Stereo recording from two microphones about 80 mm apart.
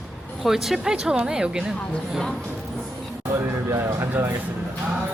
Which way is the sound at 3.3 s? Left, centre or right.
Right.